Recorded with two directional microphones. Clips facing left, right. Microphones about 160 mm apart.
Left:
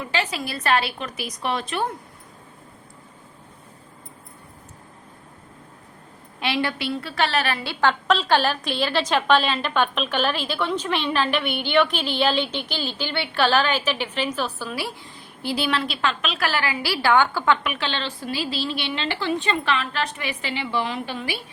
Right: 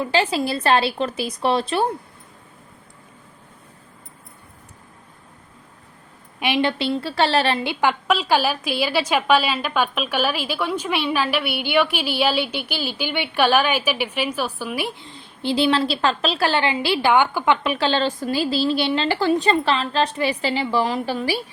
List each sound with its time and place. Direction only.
0.0 s a woman's voice: 30° right (ahead or behind)
6.4 s a woman's voice: 20° right (ahead or behind)
17.6 s a woman's voice: 35° right (ahead or behind)